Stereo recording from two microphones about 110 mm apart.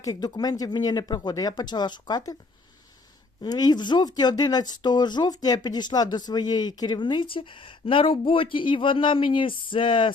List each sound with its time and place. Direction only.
0.0 s speech: 35° left (ahead or behind)
3.4 s speech: 40° left (ahead or behind)